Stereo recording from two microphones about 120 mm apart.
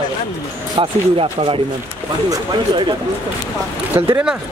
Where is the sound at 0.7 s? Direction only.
45° right (ahead or behind).